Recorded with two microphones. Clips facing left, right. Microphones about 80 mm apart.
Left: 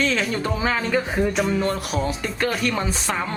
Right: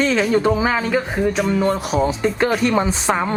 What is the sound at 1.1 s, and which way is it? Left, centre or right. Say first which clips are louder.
Speech: right 2 dB; centre.